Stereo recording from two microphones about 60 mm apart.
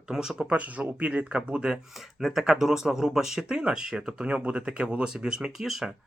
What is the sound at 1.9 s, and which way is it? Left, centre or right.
Speech, centre.